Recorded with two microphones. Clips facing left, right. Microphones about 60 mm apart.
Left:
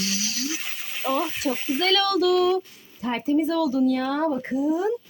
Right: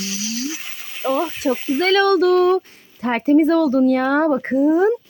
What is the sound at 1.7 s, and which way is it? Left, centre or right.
Speech, right.